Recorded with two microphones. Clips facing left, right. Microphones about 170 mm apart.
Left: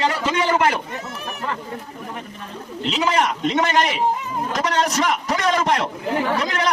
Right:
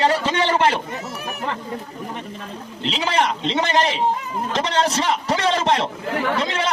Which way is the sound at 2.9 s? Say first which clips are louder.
Left 1 dB; 30° right (ahead or behind).